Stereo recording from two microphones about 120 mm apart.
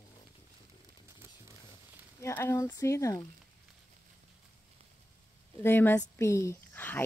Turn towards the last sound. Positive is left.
turn(degrees=15)  # may be behind; listen again after turning